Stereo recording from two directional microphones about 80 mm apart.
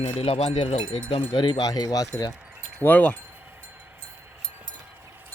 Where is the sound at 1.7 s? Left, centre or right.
Left.